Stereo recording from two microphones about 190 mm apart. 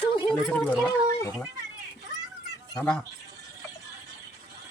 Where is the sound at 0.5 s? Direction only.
5° left (ahead or behind).